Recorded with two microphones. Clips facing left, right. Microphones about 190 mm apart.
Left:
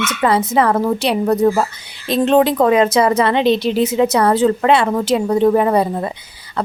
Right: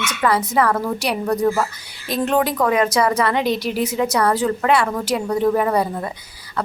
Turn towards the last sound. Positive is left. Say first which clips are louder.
# left 3 dB
turn(degrees=25)  # may be behind; listen again after turning